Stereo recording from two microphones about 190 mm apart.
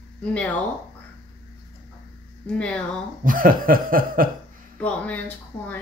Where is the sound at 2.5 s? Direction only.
5° left (ahead or behind).